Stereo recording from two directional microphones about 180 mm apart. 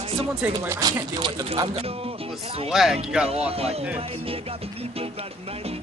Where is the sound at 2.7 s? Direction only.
Centre (ahead or behind).